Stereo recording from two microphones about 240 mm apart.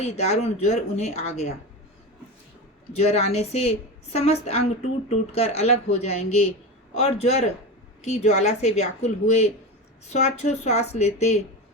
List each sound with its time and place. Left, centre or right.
0.0 s a woman's voice: left
2.9 s a woman's voice: left